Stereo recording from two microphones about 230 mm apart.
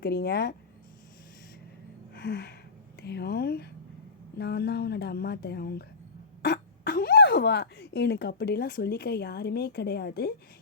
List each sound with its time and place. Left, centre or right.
0.0 s speech: left
2.1 s gasp: left
3.0 s speech: left